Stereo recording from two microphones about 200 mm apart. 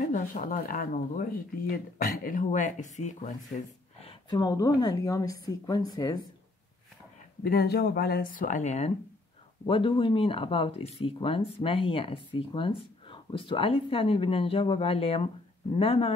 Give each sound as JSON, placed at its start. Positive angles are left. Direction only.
{"t": 0.0, "sound": "speech", "side_deg": 40}
{"t": 4.0, "sound": "speech", "side_deg": 25}
{"t": 7.4, "sound": "speech", "side_deg": 50}